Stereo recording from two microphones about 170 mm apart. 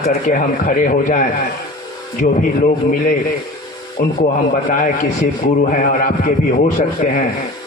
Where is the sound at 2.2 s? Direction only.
55° left (ahead or behind).